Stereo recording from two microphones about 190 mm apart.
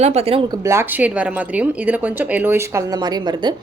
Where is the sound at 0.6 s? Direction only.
10° right (ahead or behind).